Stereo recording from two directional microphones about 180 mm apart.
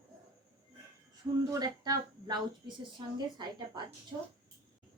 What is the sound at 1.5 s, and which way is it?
Speech, 20° right (ahead or behind).